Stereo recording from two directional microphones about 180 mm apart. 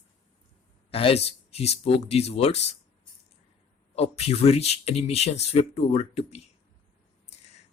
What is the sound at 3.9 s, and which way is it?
Speech, 35° left (ahead or behind).